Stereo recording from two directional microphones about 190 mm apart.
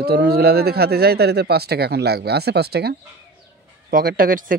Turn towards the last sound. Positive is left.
turn(degrees=-45)  # may be behind; listen again after turning